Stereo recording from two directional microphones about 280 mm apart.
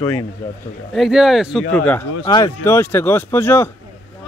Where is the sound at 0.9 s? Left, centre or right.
Centre.